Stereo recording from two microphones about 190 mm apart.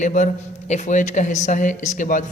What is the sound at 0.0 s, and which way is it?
Speech, 40° left (ahead or behind).